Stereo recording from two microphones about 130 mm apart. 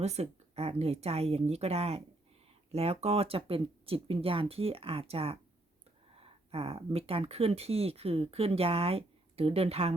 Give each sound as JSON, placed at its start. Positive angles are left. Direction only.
{"t": 0.0, "sound": "speech", "side_deg": -55}